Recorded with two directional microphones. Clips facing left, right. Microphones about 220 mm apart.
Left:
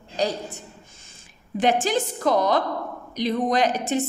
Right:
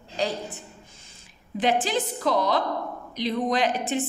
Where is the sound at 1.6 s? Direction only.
45° left (ahead or behind).